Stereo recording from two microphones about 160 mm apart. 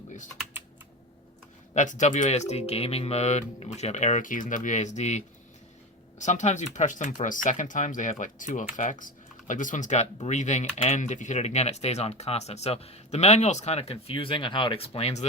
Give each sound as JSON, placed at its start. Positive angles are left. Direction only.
{"t": 1.7, "sound": "speech", "side_deg": 50}